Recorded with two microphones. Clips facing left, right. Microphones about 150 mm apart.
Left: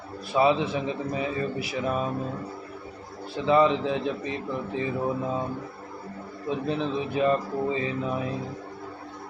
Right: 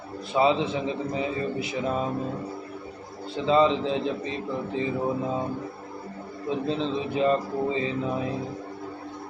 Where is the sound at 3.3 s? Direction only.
20° right (ahead or behind).